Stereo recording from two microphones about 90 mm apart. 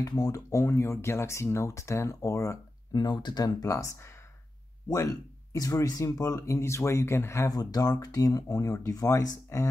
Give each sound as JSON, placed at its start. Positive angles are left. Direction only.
{"t": 0.2, "sound": "speech", "side_deg": 35}
{"t": 7.5, "sound": "speech", "side_deg": 45}